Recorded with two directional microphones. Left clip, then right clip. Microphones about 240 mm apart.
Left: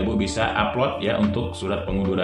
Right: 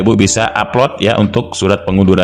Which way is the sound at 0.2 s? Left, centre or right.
Right.